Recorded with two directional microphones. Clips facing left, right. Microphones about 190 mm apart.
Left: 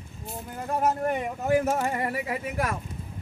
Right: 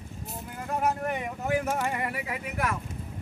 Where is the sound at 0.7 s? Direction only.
35° left (ahead or behind).